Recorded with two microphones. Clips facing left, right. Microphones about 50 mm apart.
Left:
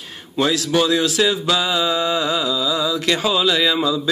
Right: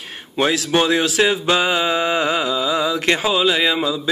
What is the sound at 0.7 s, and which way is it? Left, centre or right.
Music, right.